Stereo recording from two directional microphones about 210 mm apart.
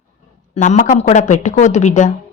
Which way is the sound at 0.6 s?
35° left (ahead or behind).